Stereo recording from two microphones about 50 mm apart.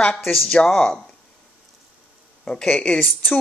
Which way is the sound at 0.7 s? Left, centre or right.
Centre.